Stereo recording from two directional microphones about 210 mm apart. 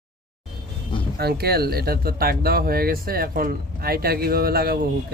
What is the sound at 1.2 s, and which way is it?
Speech, 50° right (ahead or behind).